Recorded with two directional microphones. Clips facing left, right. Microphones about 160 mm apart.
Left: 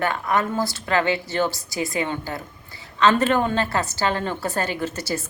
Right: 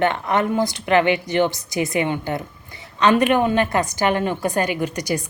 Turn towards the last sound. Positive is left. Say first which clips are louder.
# right 3 dB
turn(degrees=-15)  # may be behind; listen again after turning